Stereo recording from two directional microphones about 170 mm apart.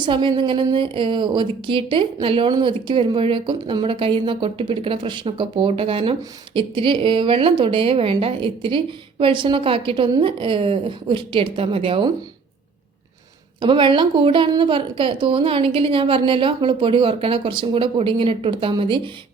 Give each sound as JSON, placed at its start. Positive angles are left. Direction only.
{"t": 0.0, "sound": "a woman's voice", "side_deg": -30}
{"t": 13.6, "sound": "a woman's voice", "side_deg": -30}